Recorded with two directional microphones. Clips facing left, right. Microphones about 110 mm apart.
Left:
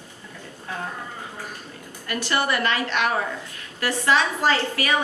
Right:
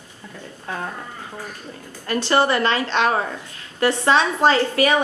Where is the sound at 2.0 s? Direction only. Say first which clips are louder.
Right 6 dB; 30° right (ahead or behind).